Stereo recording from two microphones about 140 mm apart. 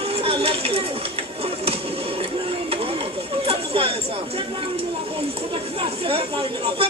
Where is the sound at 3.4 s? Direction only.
40° right (ahead or behind).